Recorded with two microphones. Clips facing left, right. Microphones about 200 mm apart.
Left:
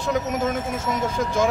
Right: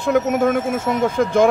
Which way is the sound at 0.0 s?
55° right (ahead or behind).